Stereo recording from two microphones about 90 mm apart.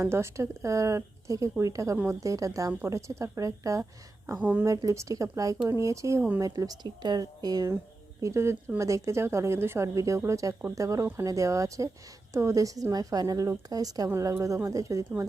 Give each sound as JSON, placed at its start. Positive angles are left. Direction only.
{"t": 0.0, "sound": "a woman's voice", "side_deg": -30}
{"t": 4.4, "sound": "speech", "side_deg": -20}
{"t": 4.6, "sound": "a woman's voice", "side_deg": -40}
{"t": 8.2, "sound": "a woman's voice", "side_deg": -30}